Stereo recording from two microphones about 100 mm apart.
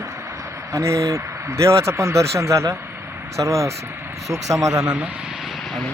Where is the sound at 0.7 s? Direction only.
30° right (ahead or behind).